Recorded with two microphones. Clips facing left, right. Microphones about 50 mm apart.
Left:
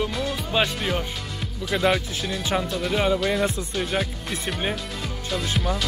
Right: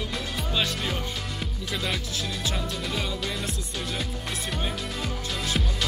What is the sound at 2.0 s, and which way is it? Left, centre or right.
Speech, left.